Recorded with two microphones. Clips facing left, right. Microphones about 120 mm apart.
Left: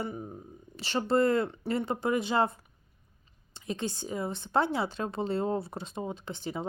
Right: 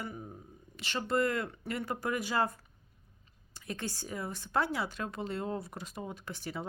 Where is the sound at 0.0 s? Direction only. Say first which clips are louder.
Left 6 dB; 25° left (ahead or behind).